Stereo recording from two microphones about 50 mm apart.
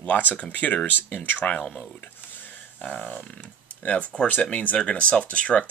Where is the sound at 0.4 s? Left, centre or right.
Left.